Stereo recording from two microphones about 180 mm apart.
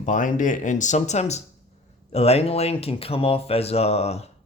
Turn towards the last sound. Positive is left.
turn(degrees=35)  # may be behind; listen again after turning